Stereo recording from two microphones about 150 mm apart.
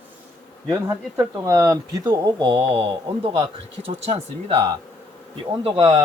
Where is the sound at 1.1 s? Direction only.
20° right (ahead or behind); by 4.5 s 40° right (ahead or behind).